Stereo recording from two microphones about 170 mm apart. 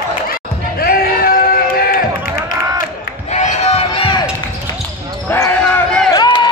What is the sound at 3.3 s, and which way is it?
Crowd, 40° left (ahead or behind).